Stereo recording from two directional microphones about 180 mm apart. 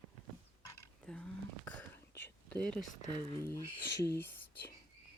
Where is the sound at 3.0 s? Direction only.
15° left (ahead or behind).